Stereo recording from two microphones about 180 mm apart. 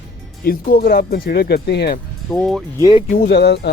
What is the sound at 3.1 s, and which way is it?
Speech, 65° left (ahead or behind).